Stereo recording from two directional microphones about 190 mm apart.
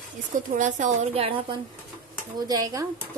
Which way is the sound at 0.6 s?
40° right (ahead or behind).